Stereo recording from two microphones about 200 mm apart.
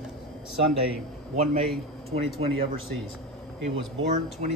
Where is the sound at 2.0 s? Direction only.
30° right (ahead or behind).